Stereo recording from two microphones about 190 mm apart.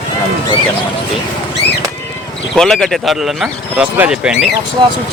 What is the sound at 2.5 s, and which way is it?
Speech, 5° left (ahead or behind).